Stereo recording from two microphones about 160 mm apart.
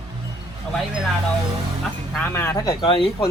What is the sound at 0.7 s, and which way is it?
Speech, 5° left (ahead or behind).